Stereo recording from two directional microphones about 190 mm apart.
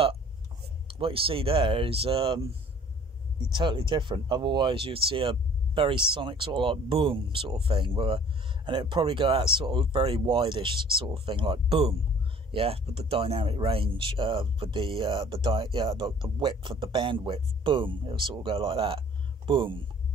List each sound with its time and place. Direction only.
0.8 s speech: 30° right (ahead or behind)
3.5 s speech: 25° right (ahead or behind)